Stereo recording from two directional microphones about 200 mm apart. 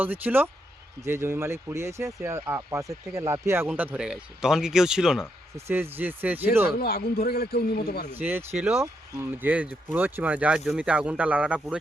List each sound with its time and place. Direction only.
0.0 s speech: 10° right (ahead or behind)
6.7 s a man's voice: 50° left (ahead or behind)
8.1 s speech: 10° right (ahead or behind)